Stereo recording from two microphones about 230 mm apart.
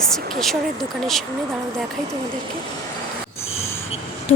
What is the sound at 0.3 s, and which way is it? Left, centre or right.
Speech, centre.